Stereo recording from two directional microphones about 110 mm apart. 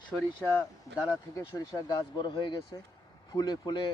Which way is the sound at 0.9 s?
35° left (ahead or behind).